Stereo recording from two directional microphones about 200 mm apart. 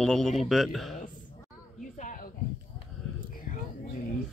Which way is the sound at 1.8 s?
40° left (ahead or behind).